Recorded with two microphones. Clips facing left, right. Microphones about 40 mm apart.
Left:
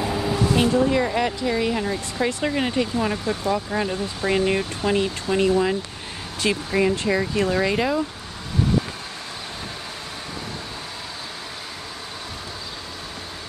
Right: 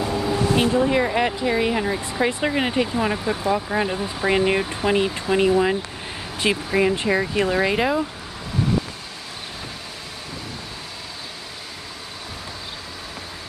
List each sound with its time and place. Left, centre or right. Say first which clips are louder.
0.0 s vehicle: right 1 dB; centre
0.6 s speech: even; centre